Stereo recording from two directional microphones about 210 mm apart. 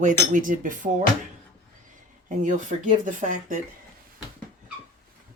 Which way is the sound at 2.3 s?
35° right (ahead or behind).